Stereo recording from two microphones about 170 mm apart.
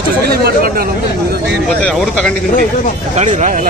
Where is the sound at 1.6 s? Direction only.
5° left (ahead or behind).